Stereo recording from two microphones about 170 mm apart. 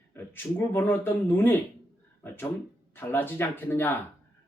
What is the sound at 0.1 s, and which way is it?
Speech, 10° left (ahead or behind).